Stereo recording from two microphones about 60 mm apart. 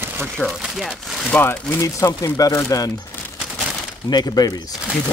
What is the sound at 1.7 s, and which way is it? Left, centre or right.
Speech, left.